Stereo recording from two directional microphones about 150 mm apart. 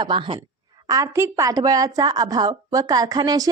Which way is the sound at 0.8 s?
25° right (ahead or behind).